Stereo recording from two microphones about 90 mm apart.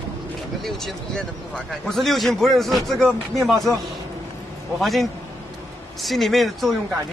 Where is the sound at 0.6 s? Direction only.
5° left (ahead or behind).